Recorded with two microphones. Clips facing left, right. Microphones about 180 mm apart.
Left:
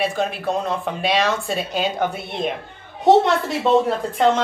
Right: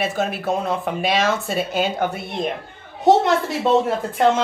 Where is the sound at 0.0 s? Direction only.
5° right (ahead or behind).